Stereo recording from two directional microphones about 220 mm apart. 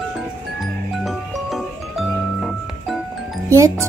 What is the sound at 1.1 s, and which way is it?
Music, centre (ahead or behind).